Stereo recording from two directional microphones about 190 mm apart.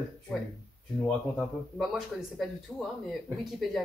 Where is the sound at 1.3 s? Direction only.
5° right (ahead or behind).